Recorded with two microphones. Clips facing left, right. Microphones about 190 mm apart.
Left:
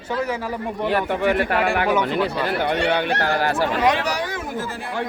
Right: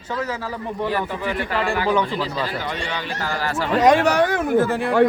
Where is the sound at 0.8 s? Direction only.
65° left (ahead or behind).